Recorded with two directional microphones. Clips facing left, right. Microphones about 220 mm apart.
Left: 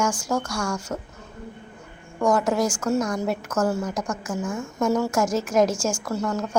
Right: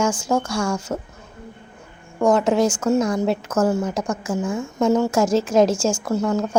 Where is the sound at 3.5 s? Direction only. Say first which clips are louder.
Right 3 dB; 5° right (ahead or behind).